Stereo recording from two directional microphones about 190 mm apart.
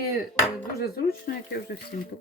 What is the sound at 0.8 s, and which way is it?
Speech, 55° left (ahead or behind).